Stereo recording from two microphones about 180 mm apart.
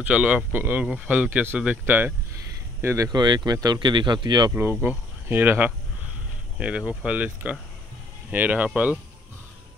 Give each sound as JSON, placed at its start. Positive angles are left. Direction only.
{"t": 0.0, "sound": "speech", "side_deg": -5}
{"t": 4.7, "sound": "speech", "side_deg": -10}